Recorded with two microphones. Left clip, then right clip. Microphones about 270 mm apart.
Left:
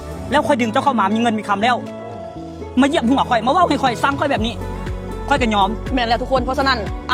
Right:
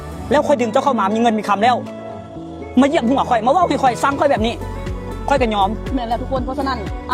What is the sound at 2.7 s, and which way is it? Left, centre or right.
Speech, right.